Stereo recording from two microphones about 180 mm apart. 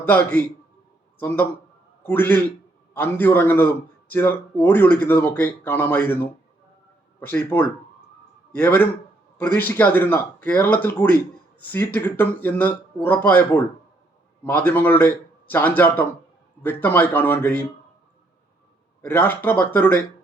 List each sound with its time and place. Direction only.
0.0 s speech: 10° left (ahead or behind)
2.0 s speech: 10° left (ahead or behind)
19.0 s speech: 10° left (ahead or behind)